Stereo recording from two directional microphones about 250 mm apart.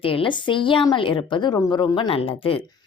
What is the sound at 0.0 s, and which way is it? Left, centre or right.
A woman's voice, left.